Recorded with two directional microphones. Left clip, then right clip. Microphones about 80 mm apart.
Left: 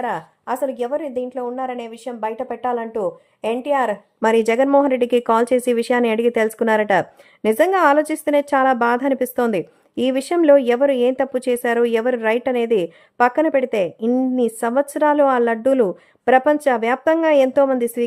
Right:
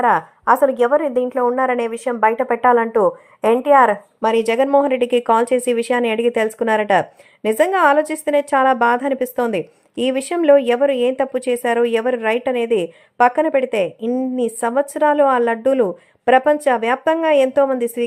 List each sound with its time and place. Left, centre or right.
0.4 s a woman's voice: right
1.5 s a woman's voice: right
2.7 s a woman's voice: right
4.2 s a woman's voice: left
14.1 s speech: left
14.4 s a woman's voice: left